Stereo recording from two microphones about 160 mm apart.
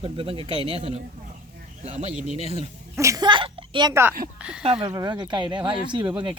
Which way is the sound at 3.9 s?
15° right (ahead or behind).